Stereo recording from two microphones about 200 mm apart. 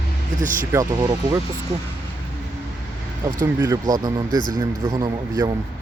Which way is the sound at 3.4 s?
15° right (ahead or behind).